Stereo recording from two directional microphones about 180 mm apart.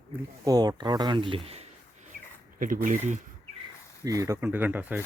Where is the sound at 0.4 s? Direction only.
20° right (ahead or behind).